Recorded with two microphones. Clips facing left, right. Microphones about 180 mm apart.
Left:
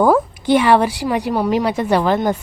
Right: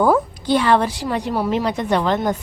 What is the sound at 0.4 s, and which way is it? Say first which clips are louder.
A woman's voice: left 4 dB; 15° left (ahead or behind).